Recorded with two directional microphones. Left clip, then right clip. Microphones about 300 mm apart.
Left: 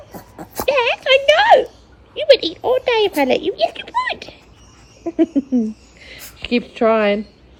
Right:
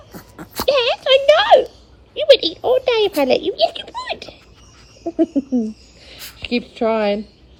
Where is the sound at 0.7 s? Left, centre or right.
Centre.